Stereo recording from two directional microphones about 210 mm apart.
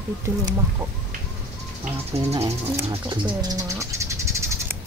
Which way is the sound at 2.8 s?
25° right (ahead or behind).